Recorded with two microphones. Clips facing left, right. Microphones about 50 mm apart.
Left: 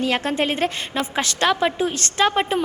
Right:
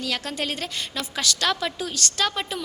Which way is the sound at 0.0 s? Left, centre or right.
Left.